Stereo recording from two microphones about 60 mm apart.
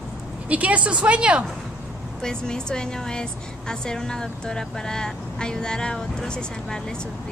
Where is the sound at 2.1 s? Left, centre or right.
Centre.